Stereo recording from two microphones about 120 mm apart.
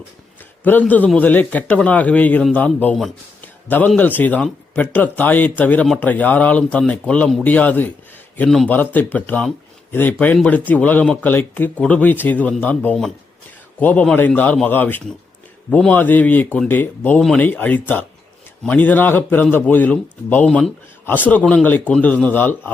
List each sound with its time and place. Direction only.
0.6 s a man's voice: 15° left (ahead or behind)
8.7 s a man's voice: 15° left (ahead or behind)